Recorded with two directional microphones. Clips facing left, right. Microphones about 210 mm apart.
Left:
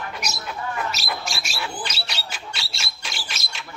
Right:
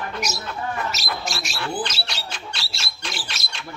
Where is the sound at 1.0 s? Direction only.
5° left (ahead or behind).